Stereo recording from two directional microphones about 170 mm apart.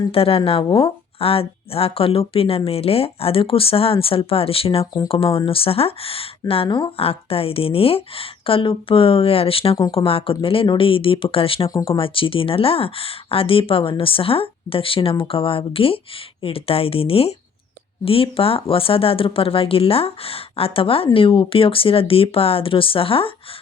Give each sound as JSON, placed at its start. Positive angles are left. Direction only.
{"t": 0.1, "sound": "speech", "side_deg": 35}